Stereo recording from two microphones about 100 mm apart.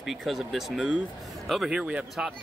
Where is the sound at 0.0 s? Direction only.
Centre (ahead or behind).